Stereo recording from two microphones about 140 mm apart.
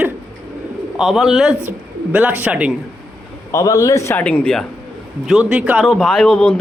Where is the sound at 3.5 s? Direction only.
25° left (ahead or behind).